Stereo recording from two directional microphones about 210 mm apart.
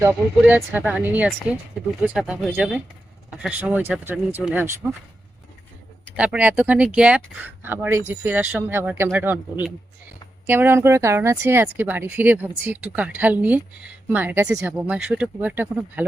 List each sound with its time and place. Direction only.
0.0 s speech: 10° right (ahead or behind)
6.1 s speech: 5° right (ahead or behind)